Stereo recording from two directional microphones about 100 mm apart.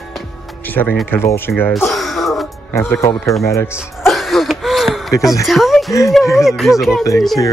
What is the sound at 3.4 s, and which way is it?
Speech, 30° left (ahead or behind).